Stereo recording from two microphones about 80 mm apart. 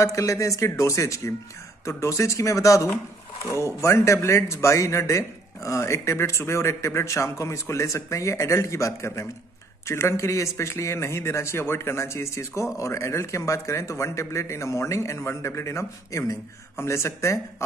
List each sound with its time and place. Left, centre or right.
0.0 s a man's voice: left